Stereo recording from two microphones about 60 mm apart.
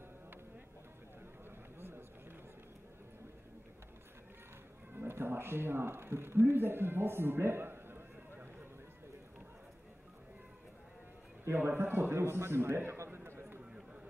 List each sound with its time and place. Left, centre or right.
1.8 s vehicle: right
4.9 s speech: right
11.4 s a man's voice: right